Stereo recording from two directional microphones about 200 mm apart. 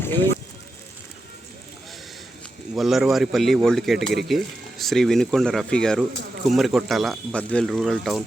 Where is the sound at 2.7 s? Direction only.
Centre (ahead or behind).